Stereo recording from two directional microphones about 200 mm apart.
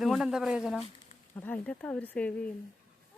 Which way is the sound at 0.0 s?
Centre (ahead or behind).